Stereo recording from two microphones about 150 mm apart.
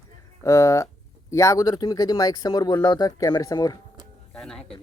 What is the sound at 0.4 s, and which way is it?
Speech, 20° left (ahead or behind).